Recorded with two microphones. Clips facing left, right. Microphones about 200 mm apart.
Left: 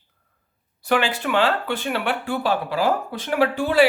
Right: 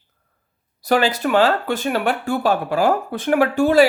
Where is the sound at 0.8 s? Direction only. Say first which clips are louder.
Right 4 dB; 40° right (ahead or behind).